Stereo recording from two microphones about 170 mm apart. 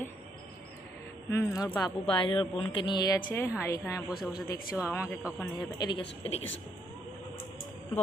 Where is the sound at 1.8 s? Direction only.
30° left (ahead or behind).